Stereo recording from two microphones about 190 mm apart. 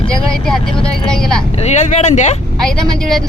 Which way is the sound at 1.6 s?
35° left (ahead or behind).